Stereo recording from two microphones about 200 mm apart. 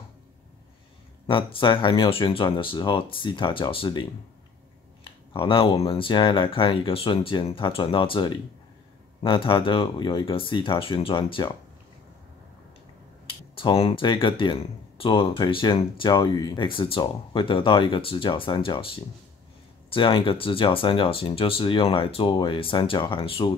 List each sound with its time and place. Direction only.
1.2 s speech: 25° left (ahead or behind)
5.3 s speech: 25° left (ahead or behind)
13.6 s speech: 25° left (ahead or behind)